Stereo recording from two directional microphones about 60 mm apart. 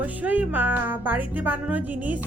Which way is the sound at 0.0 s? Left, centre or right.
Right.